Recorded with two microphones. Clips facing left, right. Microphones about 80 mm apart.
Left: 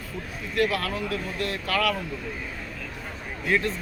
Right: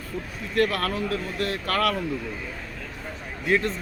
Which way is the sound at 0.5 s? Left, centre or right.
Right.